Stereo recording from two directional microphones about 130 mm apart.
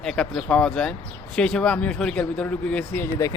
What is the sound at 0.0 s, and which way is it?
Speech, 5° left (ahead or behind).